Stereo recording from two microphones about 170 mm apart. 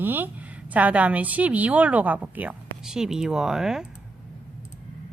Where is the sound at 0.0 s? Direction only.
10° right (ahead or behind).